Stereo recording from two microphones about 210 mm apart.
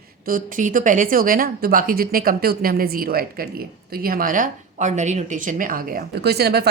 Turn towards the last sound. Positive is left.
turn(degrees=-50)  # may be behind; listen again after turning